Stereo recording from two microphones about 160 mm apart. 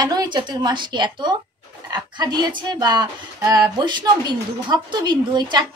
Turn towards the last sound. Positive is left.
turn(degrees=-25)  # may be behind; listen again after turning